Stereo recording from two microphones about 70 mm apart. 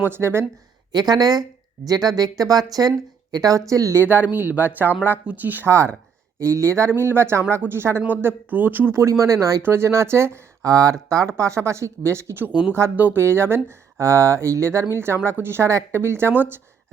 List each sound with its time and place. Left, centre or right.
0.0 s speech: right
0.9 s speech: right
3.7 s speech: right
4.0 s speech: right
5.6 s speech: right
9.0 s speech: right
9.6 s speech: right
10.6 s speech: right